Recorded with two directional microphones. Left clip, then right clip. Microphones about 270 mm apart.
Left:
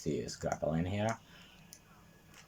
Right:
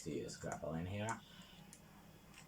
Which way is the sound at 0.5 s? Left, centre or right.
Left.